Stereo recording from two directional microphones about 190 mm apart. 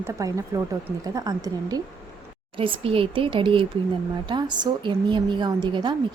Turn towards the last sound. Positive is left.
turn(degrees=-25)  # may be behind; listen again after turning